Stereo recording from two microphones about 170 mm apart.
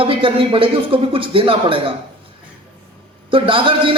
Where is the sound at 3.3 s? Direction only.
30° right (ahead or behind).